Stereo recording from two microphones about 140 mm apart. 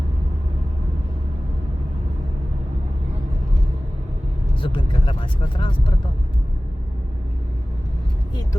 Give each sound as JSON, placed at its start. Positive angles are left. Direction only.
{"t": 4.6, "sound": "speech", "side_deg": 40}